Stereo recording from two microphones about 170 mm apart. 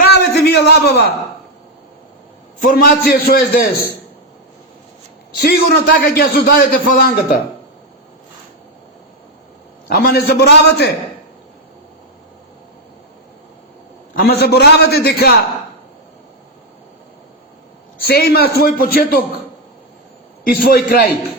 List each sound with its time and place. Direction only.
0.1 s a sound: 80° left
2.6 s a man's voice: 55° left (ahead or behind)
5.4 s a man's voice: 65° left (ahead or behind)
9.9 s a man's voice: 65° left (ahead or behind)
14.2 s a man's voice: 65° left (ahead or behind)
18.1 s a man's voice: 65° left (ahead or behind)
20.4 s a man's voice: 60° left (ahead or behind)